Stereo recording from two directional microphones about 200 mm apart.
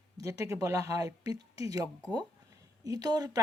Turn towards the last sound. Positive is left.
turn(degrees=-20)  # may be behind; listen again after turning